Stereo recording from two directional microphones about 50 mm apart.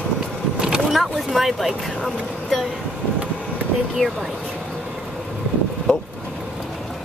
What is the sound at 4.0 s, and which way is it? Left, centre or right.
Speech, centre.